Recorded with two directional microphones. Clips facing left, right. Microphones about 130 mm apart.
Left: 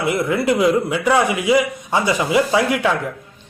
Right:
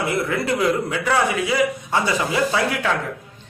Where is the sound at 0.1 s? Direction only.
15° left (ahead or behind).